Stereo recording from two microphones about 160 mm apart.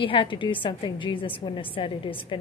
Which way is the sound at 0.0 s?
35° left (ahead or behind).